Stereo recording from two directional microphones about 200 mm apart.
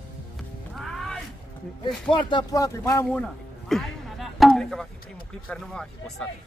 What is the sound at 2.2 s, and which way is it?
Speech, 20° left (ahead or behind).